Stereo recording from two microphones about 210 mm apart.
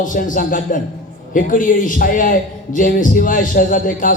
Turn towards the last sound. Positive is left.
turn(degrees=40)  # may be behind; listen again after turning